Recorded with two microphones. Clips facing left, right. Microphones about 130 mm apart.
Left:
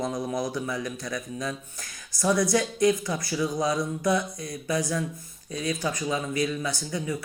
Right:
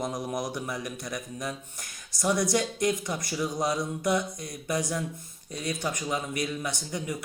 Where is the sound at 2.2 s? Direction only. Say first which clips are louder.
Left 3 dB; 15° right (ahead or behind).